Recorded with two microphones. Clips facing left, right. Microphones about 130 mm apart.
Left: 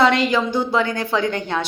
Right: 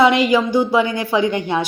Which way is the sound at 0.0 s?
10° right (ahead or behind).